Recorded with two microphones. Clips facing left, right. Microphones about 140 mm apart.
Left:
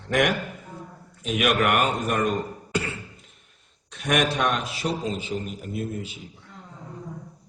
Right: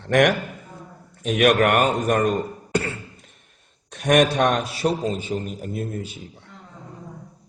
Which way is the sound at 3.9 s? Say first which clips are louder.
Right 7 dB; 50° right (ahead or behind).